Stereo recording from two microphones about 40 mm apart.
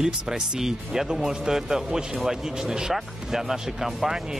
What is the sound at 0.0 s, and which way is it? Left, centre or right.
Speech, centre.